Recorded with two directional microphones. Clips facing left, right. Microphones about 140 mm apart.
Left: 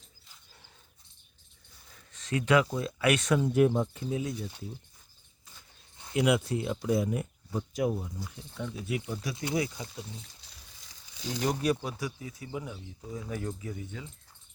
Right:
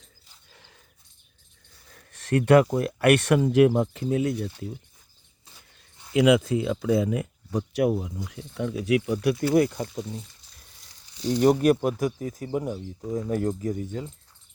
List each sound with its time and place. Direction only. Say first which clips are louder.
0.5 s dog: right 6 dB; 90° right
1.9 s a sound: right 8 dB; 55° right (ahead or behind)
2.6 s speech: right 7 dB; 65° right (ahead or behind); by 4.0 s 85° right
4.0 s speech: right 8 dB; 65° right (ahead or behind)
6.1 s speech: right 7 dB; 90° right
9.3 s speech: right 9 dB; 20° left (ahead or behind)
9.6 s speech: right 10 dB; 55° right (ahead or behind)
10.4 s a sound: left 2 dB; 75° left (ahead or behind)
11.4 s speech: right 9 dB; 55° right (ahead or behind)